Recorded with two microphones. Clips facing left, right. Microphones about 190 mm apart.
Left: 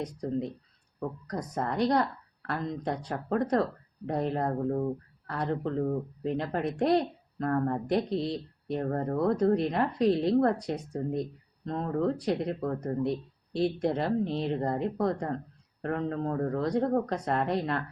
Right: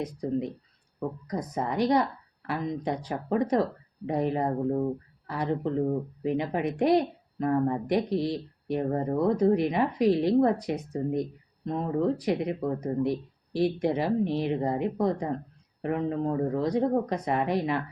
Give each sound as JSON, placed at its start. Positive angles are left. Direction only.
{"t": 0.0, "sound": "speech", "side_deg": -10}
{"t": 8.2, "sound": "speech", "side_deg": -70}
{"t": 8.7, "sound": "speech", "side_deg": -5}